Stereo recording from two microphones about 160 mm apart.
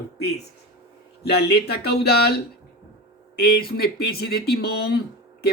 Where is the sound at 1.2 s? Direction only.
90° left.